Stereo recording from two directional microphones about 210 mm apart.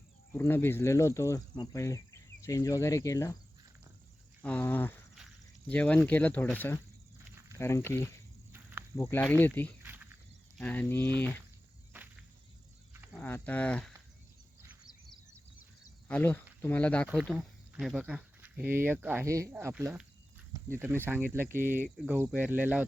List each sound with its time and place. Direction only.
0.3 s speech: 10° left (ahead or behind)
4.4 s speech: 10° left (ahead or behind)
9.8 s snake: 10° right (ahead or behind)
10.6 s speech: 10° left (ahead or behind)
13.1 s speech: 10° left (ahead or behind)
14.7 s a sound: 5° right (ahead or behind)
16.0 s speech: 10° left (ahead or behind); by 21.2 s 10° right (ahead or behind)
21.3 s cricket: 10° right (ahead or behind)